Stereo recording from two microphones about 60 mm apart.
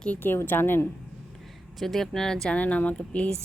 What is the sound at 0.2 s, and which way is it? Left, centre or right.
Speech, left.